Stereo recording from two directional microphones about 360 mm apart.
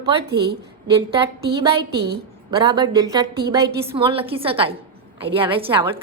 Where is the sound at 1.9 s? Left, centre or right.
Right.